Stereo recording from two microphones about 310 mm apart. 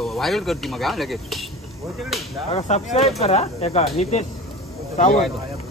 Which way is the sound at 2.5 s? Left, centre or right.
Left.